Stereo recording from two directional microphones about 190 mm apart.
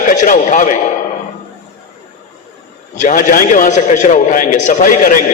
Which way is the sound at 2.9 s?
40° left (ahead or behind).